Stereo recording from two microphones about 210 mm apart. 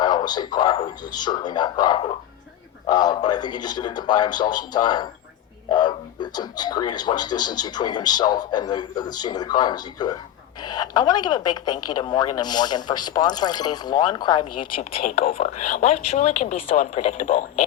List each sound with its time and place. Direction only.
0.0 s speech: 20° left (ahead or behind)
15.3 s a woman's voice: 35° left (ahead or behind)